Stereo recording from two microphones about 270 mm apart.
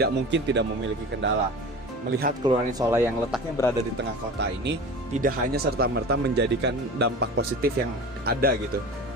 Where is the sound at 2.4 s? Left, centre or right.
Centre.